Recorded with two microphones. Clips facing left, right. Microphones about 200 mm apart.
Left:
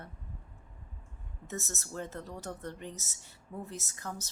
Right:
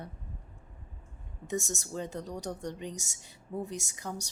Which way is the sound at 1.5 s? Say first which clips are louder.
Right 6 dB; 15° right (ahead or behind).